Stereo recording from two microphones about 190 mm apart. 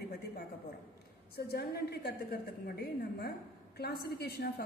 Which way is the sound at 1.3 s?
55° left (ahead or behind).